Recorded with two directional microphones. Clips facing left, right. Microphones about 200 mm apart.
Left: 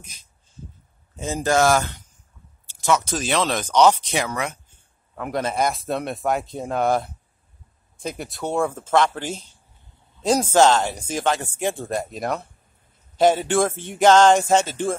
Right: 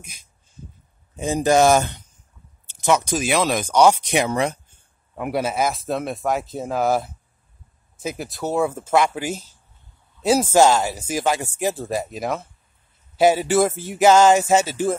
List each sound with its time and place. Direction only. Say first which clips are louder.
0.0 s speech: right 2 dB; 10° right (ahead or behind)
4.3 s speech: right 6 dB; 30° right (ahead or behind)
5.1 s speech: right 2 dB; 10° right (ahead or behind)